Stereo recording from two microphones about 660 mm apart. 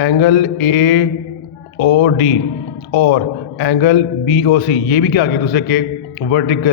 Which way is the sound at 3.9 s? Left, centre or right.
Centre.